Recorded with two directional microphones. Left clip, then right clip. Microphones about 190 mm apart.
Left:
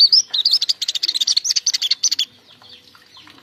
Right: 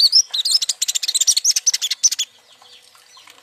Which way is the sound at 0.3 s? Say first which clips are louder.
Left 2 dB; 15° right (ahead or behind).